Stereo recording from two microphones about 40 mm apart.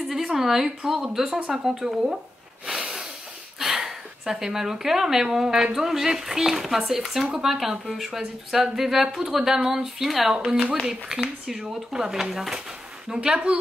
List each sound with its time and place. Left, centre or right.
0.1 s a sound: centre
0.9 s speech: centre
3.5 s speech: centre
10.3 s speech: centre
13.1 s speech: right